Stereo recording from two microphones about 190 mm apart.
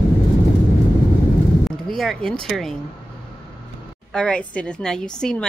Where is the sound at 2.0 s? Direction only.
5° left (ahead or behind).